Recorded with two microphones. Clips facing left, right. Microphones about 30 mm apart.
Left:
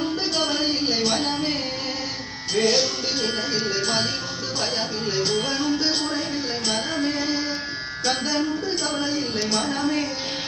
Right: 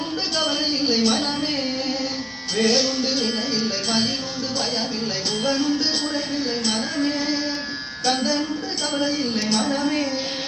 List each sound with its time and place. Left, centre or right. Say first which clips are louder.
0.5 s a sound: even; right
0.9 s a sound: right 2 dB; right
2.6 s music: right 1 dB; right
5.4 s music: right 2 dB; right
8.0 s music: right 2 dB; right
9.0 s speech: right 2 dB; right